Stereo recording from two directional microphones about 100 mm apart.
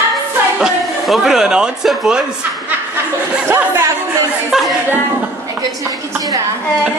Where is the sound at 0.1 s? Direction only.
5° right (ahead or behind).